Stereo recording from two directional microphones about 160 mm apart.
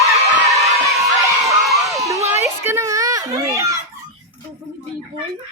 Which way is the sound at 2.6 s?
15° right (ahead or behind).